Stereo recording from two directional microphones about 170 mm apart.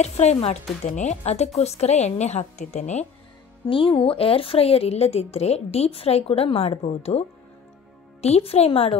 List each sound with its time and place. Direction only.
0.0 s a woman's voice: 40° left (ahead or behind)
3.6 s a woman's voice: 30° left (ahead or behind)